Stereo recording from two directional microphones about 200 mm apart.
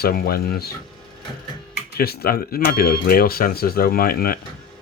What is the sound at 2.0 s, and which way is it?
Speech, 50° left (ahead or behind).